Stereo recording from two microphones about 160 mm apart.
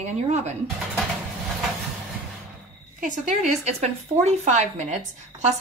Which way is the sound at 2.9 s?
55° right (ahead or behind).